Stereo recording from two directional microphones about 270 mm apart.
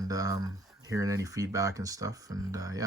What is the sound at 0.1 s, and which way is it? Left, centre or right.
Speech, centre.